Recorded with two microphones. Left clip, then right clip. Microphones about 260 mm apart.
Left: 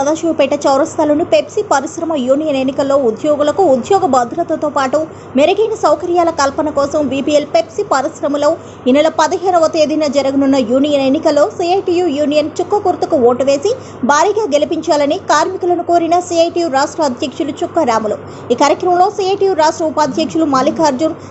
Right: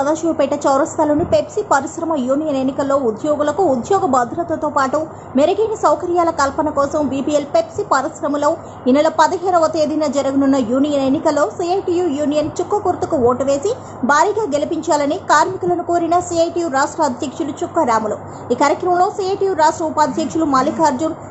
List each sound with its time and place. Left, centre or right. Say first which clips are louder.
0.0 s a woman's voice: left 3 dB; centre
9.7 s a woman's voice: left 5 dB; right
10.0 s a woman's voice: left 4 dB; centre